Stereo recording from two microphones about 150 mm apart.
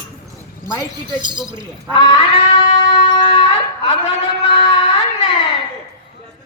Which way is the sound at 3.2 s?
40° left (ahead or behind).